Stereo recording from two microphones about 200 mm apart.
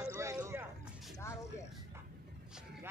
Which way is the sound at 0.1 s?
10° right (ahead or behind).